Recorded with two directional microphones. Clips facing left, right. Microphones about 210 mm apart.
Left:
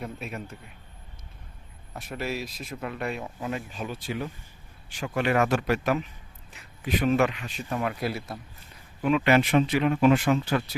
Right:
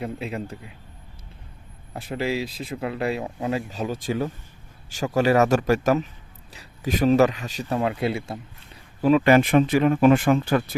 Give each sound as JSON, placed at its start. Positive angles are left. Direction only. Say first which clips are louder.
{"t": 0.0, "sound": "a man's voice", "louder": "right 6 dB", "side_deg": -30}
{"t": 1.9, "sound": "speech", "louder": "right 6 dB", "side_deg": -30}
{"t": 9.0, "sound": "speech", "louder": "right 5 dB", "side_deg": -35}